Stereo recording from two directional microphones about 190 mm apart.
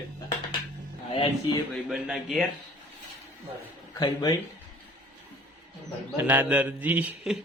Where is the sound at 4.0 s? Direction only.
20° left (ahead or behind).